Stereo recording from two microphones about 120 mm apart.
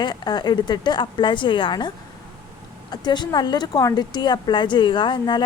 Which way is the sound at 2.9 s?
35° left (ahead or behind).